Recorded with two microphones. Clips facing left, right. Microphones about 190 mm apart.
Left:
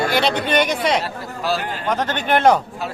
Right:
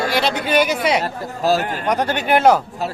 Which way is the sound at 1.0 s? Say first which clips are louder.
Right 5 dB; 45° right (ahead or behind).